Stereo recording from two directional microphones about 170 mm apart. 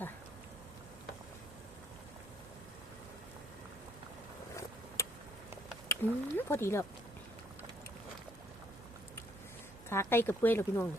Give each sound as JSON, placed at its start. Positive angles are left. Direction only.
{"t": 5.0, "sound": "a sound", "side_deg": 15}
{"t": 5.9, "sound": "speech", "side_deg": 15}
{"t": 9.9, "sound": "speech", "side_deg": 15}